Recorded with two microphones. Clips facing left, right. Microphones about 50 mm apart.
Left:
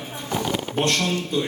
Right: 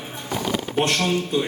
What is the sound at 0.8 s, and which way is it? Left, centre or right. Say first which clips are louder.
Speech: right 2 dB; centre.